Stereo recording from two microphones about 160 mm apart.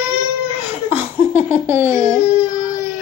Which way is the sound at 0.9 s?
10° right (ahead or behind).